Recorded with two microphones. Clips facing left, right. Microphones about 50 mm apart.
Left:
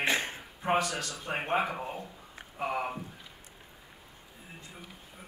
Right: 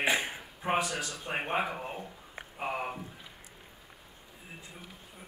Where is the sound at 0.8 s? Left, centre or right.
Right.